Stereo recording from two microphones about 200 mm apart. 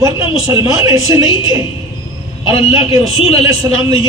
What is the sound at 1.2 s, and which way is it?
Speech, 20° left (ahead or behind).